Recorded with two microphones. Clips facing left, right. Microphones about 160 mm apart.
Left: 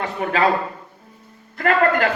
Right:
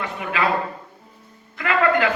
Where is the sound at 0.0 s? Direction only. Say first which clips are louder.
Left 4 dB; 40° left (ahead or behind).